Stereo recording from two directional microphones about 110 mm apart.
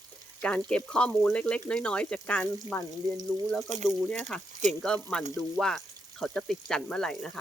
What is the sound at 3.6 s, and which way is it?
Speech, 90° right.